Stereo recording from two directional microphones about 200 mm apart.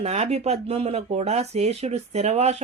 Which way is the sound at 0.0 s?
30° right (ahead or behind).